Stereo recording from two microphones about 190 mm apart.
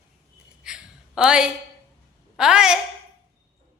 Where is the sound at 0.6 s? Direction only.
5° right (ahead or behind).